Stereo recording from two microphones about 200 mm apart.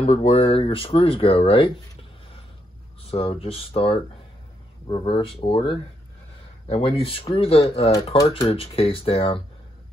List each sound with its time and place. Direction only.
0.0 s speech: 35° left (ahead or behind)
3.1 s speech: 30° left (ahead or behind)